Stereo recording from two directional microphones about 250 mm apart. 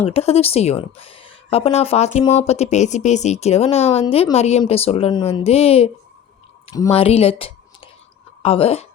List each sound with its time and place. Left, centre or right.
0.0 s speech: left